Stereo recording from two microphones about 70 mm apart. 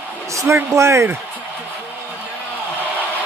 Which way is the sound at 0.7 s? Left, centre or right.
Right.